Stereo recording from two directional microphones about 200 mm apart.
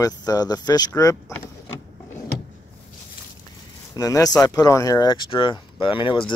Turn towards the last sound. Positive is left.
turn(degrees=25)  # may be behind; listen again after turning